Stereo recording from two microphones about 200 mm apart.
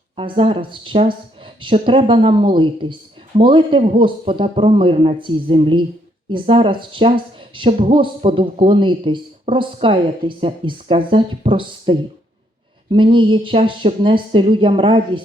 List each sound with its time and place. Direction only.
0.2 s speech: 25° right (ahead or behind)